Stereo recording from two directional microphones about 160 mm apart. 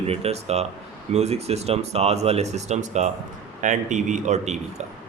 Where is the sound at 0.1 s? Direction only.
40° right (ahead or behind).